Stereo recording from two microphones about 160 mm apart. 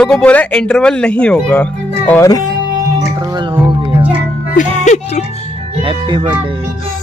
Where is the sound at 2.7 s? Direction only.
20° right (ahead or behind).